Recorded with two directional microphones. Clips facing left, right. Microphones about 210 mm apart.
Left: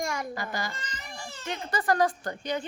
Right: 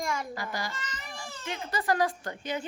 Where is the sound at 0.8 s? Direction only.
45° left (ahead or behind).